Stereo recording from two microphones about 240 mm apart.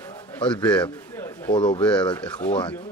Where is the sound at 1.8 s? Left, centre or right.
Centre.